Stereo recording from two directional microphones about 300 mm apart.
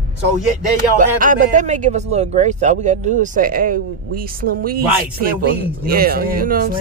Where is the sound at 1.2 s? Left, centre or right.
Right.